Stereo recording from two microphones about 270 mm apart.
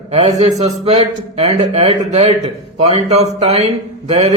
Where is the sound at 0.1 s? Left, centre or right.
Right.